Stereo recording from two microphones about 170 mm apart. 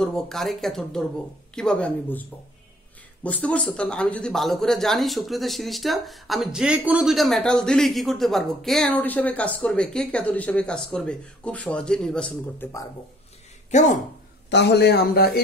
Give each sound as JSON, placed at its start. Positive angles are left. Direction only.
{"t": 0.0, "sound": "speech", "side_deg": 5}
{"t": 3.3, "sound": "speech", "side_deg": 10}
{"t": 13.7, "sound": "speech", "side_deg": 45}
{"t": 14.5, "sound": "a man's voice", "side_deg": 85}